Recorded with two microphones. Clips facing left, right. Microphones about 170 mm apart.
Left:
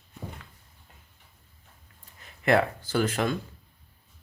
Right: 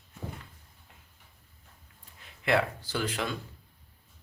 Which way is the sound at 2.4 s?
45° left (ahead or behind).